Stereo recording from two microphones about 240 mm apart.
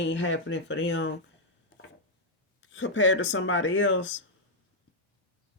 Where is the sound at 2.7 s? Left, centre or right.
Left.